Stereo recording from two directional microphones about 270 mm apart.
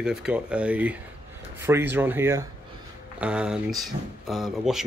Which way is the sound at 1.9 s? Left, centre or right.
Centre.